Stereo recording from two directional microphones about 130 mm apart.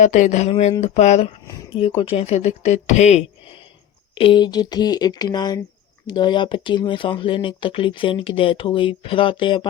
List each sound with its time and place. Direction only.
0.0 s speech: 70° left (ahead or behind)
2.0 s speech: 40° left (ahead or behind)
2.2 s speech: 60° left (ahead or behind)
4.1 s speech: 45° left (ahead or behind)